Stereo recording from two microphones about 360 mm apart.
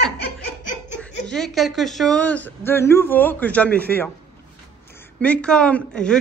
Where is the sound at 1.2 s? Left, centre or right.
Centre.